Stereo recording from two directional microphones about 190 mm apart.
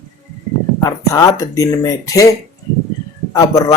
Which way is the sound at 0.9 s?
20° left (ahead or behind).